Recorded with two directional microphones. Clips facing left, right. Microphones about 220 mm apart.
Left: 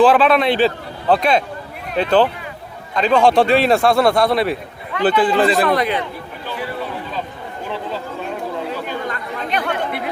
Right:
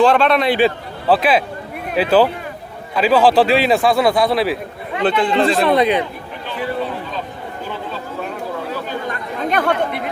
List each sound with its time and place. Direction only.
0.0 s a man's voice: centre (ahead or behind)
5.6 s a man's voice: 20° right (ahead or behind)
9.5 s speech: 45° right (ahead or behind)